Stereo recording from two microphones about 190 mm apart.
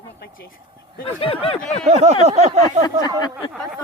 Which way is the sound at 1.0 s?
30° left (ahead or behind).